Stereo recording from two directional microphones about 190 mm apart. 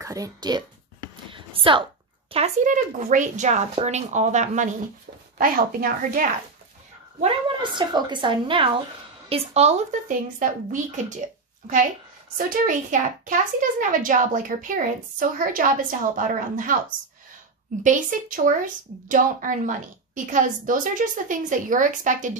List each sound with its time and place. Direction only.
0.0 s a woman's voice: 20° right (ahead or behind)
1.3 s a sound: 25° right (ahead or behind)
2.3 s speech: 40° right (ahead or behind)
7.7 s a woman's voice: 25° right (ahead or behind); by 16.7 s 45° right (ahead or behind)
17.8 s speech: 45° right (ahead or behind)